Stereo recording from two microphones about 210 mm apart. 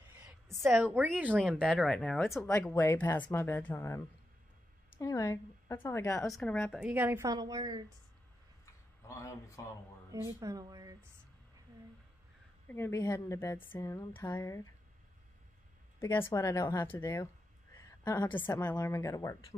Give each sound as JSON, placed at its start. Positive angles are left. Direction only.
{"t": 0.0, "sound": "a woman's voice", "side_deg": -10}
{"t": 2.4, "sound": "speech", "side_deg": 15}
{"t": 5.0, "sound": "speech", "side_deg": 15}
{"t": 6.3, "sound": "a woman's voice", "side_deg": 5}
{"t": 9.0, "sound": "speech", "side_deg": 15}
{"t": 10.1, "sound": "a woman's voice", "side_deg": -15}
{"t": 12.6, "sound": "speech", "side_deg": 10}
{"t": 16.0, "sound": "a woman's voice", "side_deg": 10}